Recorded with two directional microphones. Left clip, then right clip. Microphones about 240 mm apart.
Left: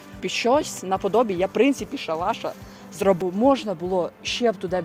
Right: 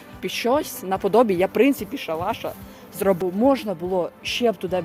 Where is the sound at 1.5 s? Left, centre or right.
Centre.